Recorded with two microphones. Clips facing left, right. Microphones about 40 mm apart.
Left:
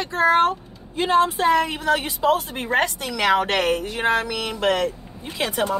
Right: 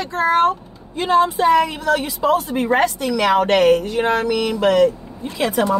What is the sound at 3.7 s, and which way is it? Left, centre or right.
Speech, left.